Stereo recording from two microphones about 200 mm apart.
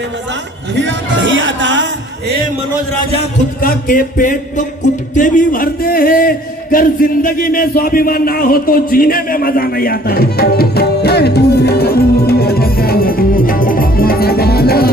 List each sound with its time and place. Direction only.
0.8 s speech: 65° right (ahead or behind)
3.6 s a man's voice: 45° left (ahead or behind)